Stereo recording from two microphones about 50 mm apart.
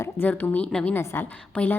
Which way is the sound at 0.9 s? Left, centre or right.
Left.